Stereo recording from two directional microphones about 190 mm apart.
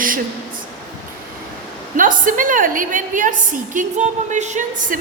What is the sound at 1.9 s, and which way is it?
A woman's voice, 45° right (ahead or behind).